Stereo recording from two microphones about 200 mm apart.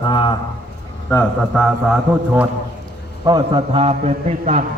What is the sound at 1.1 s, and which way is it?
Mantra, centre (ahead or behind).